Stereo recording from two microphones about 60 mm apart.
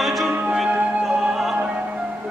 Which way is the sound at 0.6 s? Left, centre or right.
Right.